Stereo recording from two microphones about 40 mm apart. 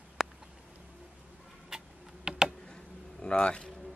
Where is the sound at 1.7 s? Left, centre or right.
Centre.